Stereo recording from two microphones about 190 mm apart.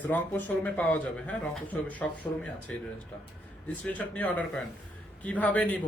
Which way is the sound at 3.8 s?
10° left (ahead or behind).